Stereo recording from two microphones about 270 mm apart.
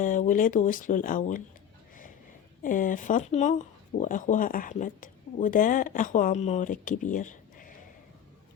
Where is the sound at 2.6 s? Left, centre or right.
Left.